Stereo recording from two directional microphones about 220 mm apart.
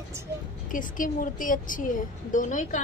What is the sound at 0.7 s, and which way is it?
A woman's voice, 35° left (ahead or behind).